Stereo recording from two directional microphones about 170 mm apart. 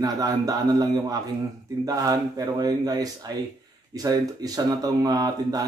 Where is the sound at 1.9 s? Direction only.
20° right (ahead or behind).